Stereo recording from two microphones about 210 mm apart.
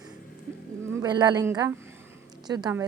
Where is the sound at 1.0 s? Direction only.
20° right (ahead or behind).